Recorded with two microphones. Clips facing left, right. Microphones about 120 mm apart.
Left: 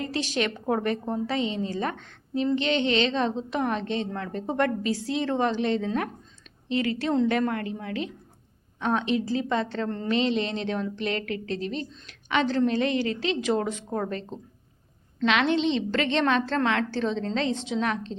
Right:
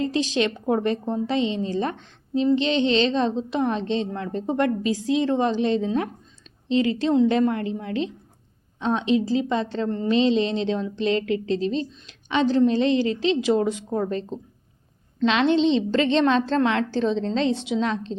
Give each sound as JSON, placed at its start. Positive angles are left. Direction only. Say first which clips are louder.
{"t": 0.0, "sound": "a woman's voice", "louder": "right 5 dB", "side_deg": -20}